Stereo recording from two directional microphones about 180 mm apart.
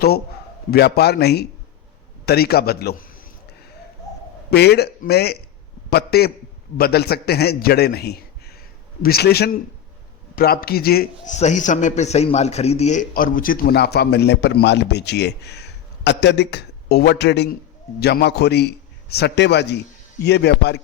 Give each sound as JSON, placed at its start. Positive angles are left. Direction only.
{"t": 0.7, "sound": "a man's voice", "side_deg": 60}
{"t": 4.5, "sound": "a man's voice", "side_deg": 65}
{"t": 11.3, "sound": "a man's voice", "side_deg": 40}